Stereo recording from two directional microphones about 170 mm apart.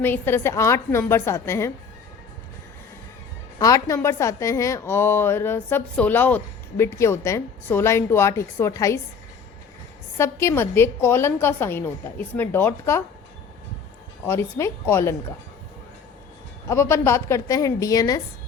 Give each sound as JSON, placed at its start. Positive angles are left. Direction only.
{"t": 0.0, "sound": "a woman's voice", "side_deg": 15}
{"t": 3.6, "sound": "a woman's voice", "side_deg": 20}
{"t": 10.2, "sound": "a woman's voice", "side_deg": 15}
{"t": 14.3, "sound": "a woman's voice", "side_deg": 15}
{"t": 16.6, "sound": "a woman's voice", "side_deg": 15}